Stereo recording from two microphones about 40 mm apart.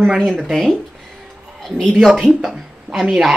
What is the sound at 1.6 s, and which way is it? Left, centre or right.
A woman's voice, centre.